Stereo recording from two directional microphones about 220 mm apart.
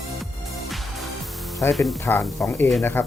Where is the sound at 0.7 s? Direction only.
Centre (ahead or behind).